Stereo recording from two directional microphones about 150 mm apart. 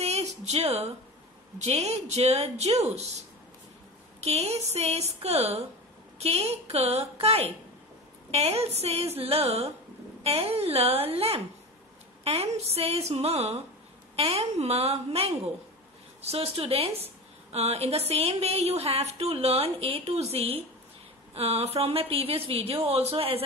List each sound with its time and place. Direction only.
0.0 s a sound: 45° right (ahead or behind)
1.6 s a woman's voice: 45° right (ahead or behind)
4.2 s a woman's voice: 45° right (ahead or behind)